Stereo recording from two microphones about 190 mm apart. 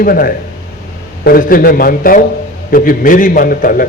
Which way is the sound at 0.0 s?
50° left (ahead or behind).